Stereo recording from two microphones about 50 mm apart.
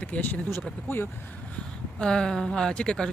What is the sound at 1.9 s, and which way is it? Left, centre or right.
Speech, centre.